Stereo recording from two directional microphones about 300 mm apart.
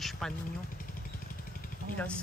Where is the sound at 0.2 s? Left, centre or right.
Centre.